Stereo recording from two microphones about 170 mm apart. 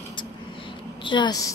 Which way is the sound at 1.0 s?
30° left (ahead or behind).